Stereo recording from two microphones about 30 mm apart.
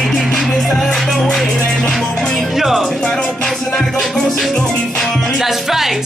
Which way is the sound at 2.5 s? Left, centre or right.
Centre.